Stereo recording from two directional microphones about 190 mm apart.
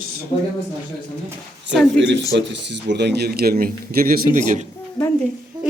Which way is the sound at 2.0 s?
70° right (ahead or behind).